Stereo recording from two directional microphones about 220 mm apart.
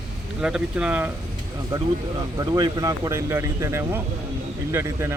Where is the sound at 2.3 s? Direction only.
15° right (ahead or behind).